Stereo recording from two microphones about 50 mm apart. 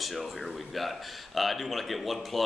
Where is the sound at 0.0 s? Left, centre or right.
Centre.